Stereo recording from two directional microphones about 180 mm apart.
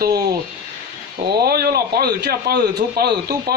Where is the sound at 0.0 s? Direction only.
60° right (ahead or behind).